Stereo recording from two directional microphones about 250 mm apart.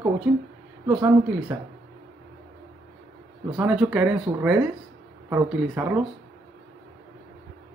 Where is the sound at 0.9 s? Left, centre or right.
Centre.